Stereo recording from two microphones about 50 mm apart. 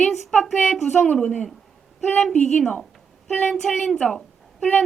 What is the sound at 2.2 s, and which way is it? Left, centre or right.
A woman's voice, centre.